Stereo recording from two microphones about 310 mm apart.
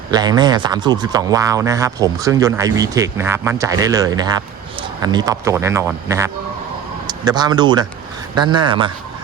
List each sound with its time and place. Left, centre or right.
0.1 s speech: centre